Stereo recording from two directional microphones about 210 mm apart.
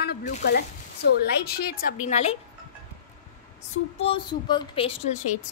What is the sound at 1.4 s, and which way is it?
Speech, 50° left (ahead or behind).